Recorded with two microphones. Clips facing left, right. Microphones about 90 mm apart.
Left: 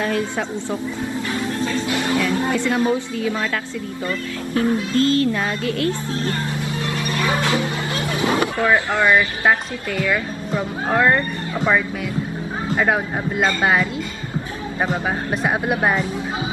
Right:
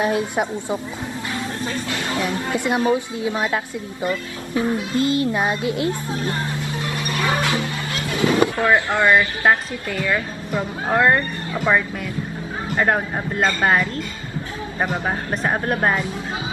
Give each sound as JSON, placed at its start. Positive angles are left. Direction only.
{"t": 0.0, "sound": "a woman's voice", "side_deg": -20}
{"t": 2.1, "sound": "a woman's voice", "side_deg": -20}
{"t": 7.2, "sound": "music", "side_deg": -20}
{"t": 8.5, "sound": "speech", "side_deg": -15}
{"t": 9.9, "sound": "speech", "side_deg": -5}
{"t": 12.8, "sound": "speech", "side_deg": 5}
{"t": 15.0, "sound": "speech", "side_deg": 5}